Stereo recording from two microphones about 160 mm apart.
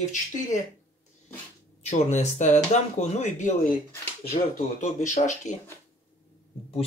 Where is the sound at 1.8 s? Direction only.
45° left (ahead or behind).